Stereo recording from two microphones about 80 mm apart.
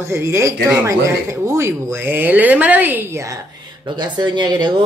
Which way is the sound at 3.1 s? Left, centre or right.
Right.